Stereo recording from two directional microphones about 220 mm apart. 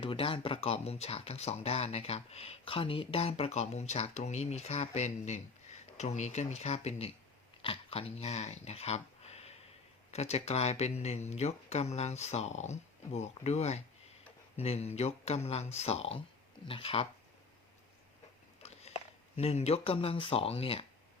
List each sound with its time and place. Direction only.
0.0 s speech: 25° left (ahead or behind)
18.6 s a sound: 30° left (ahead or behind)
19.4 s speech: 30° left (ahead or behind)